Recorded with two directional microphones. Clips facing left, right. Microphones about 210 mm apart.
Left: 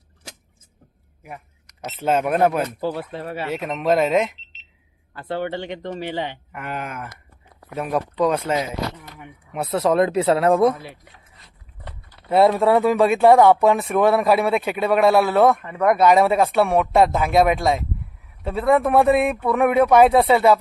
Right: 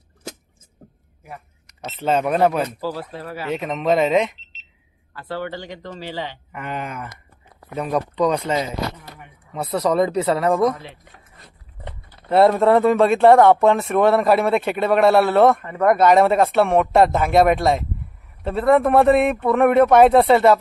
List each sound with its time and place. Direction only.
1.8 s speech: 10° left (ahead or behind)
2.8 s speech: 25° left (ahead or behind)
3.5 s speech: 5° left (ahead or behind)
5.1 s speech: 20° left (ahead or behind)
6.5 s speech: 5° left (ahead or behind)
10.2 s speech: 20° left (ahead or behind)
11.1 s a sound: 50° right (ahead or behind)
12.3 s speech: centre (ahead or behind)